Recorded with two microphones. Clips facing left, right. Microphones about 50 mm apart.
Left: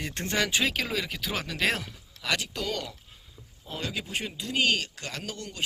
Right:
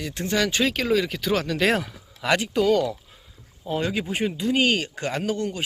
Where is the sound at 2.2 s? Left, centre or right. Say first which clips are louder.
Right 7 dB; right.